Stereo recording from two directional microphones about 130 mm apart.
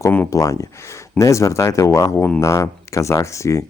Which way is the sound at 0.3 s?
25° left (ahead or behind).